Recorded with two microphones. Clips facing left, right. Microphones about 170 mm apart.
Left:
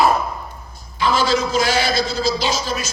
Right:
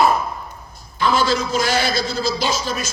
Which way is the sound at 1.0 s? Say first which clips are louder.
Even; 55° right (ahead or behind).